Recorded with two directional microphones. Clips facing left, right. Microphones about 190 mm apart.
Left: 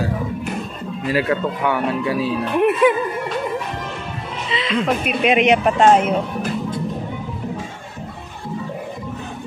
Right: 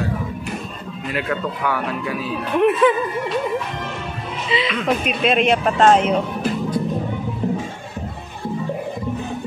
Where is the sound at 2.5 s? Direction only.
10° left (ahead or behind).